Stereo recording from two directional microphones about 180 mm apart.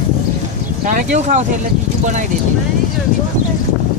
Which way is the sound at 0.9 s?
45° right (ahead or behind).